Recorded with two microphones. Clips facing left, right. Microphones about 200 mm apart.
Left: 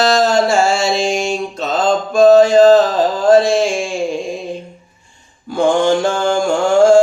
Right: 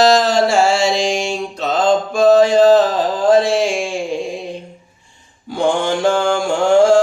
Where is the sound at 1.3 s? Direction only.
45° left (ahead or behind).